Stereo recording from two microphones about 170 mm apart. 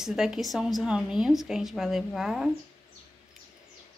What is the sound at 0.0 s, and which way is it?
Frying, 5° right (ahead or behind).